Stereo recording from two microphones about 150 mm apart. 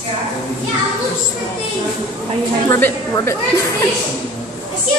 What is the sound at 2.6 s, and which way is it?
Speech, 15° left (ahead or behind).